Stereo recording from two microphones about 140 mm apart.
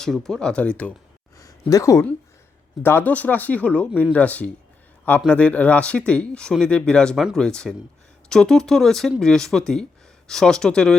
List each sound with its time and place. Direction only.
0.0 s speech: 5° left (ahead or behind)
1.6 s speech: 20° left (ahead or behind); by 10.9 s 5° left (ahead or behind)